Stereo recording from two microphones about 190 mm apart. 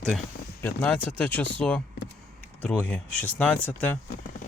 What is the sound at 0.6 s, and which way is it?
Speech, 10° left (ahead or behind).